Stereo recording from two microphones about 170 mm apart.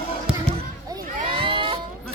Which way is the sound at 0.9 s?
30° right (ahead or behind).